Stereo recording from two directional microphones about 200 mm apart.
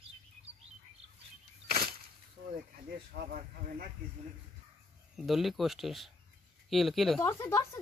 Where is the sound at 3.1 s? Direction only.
50° right (ahead or behind).